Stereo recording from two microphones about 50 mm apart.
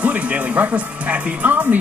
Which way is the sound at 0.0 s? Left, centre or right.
Right.